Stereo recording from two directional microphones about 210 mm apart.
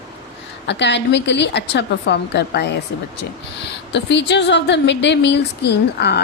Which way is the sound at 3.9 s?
55° left (ahead or behind).